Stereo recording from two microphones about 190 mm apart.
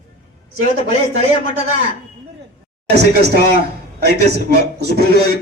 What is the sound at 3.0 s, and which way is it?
Speech, 60° right (ahead or behind).